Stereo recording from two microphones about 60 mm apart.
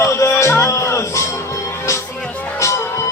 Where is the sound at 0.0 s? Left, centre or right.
Left.